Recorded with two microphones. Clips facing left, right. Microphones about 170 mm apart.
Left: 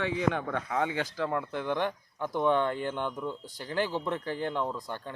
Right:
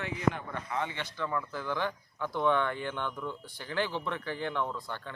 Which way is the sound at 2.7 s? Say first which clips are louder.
Left 3 dB; 45° left (ahead or behind).